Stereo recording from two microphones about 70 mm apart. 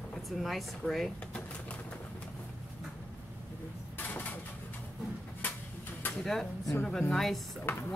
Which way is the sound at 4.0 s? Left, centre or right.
Left.